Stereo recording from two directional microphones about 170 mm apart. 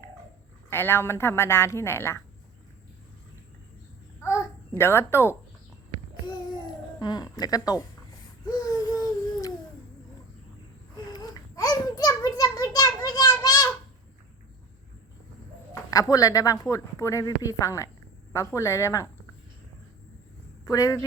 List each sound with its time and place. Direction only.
0.7 s a woman's voice: 15° left (ahead or behind)
4.2 s babbling: 15° left (ahead or behind)
4.8 s a woman's voice: 15° left (ahead or behind)
7.0 s speech: 25° left (ahead or behind)
8.4 s a sound: 20° left (ahead or behind)
11.1 s a sound: 20° left (ahead or behind)
15.7 s a woman's voice: 20° left (ahead or behind)
20.7 s speech: 20° left (ahead or behind)